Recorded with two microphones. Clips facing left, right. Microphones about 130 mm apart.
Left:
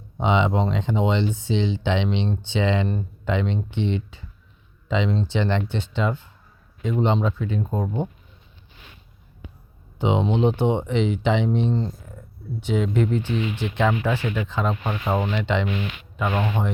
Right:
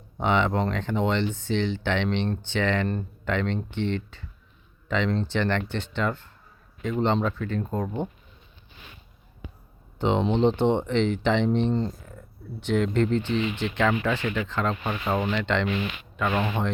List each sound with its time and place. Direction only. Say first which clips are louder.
0.2 s speech: left 2 dB; 15° left (ahead or behind)
10.0 s speech: left 1 dB; 10° left (ahead or behind)